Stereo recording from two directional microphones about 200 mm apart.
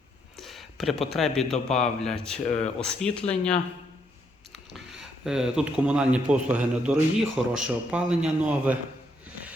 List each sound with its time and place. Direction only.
0.3 s a man's voice: centre (ahead or behind)
2.6 s speech: 35° left (ahead or behind)
2.8 s a man's voice: 5° left (ahead or behind)
5.2 s a man's voice: 5° right (ahead or behind)